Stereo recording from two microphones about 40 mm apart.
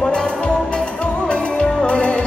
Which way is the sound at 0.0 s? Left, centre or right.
Left.